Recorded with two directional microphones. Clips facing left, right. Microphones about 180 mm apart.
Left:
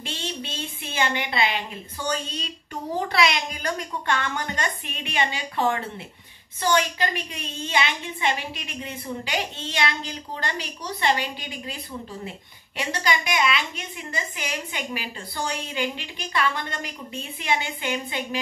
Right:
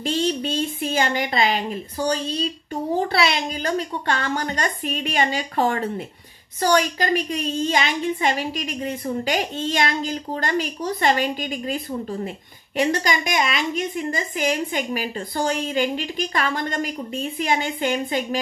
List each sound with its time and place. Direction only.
0.0 s a woman's voice: 40° right (ahead or behind)